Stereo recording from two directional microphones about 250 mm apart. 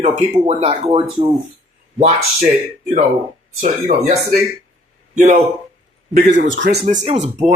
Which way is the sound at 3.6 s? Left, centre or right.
Right.